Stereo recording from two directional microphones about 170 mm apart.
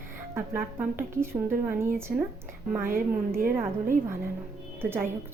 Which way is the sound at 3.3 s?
55° right (ahead or behind).